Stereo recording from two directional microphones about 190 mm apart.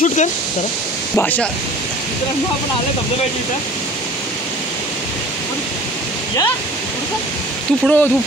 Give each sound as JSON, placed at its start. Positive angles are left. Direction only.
{"t": 0.0, "sound": "speech", "side_deg": 40}
{"t": 1.1, "sound": "speech", "side_deg": 10}
{"t": 7.8, "sound": "speech", "side_deg": 10}